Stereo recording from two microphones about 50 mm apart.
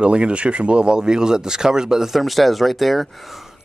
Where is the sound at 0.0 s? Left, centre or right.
Right.